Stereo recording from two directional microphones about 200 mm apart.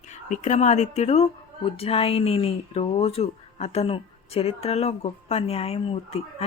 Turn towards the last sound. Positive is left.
turn(degrees=30)  # may be behind; listen again after turning